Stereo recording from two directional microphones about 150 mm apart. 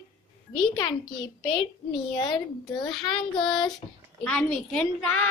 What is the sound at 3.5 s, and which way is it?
Speech, 30° left (ahead or behind).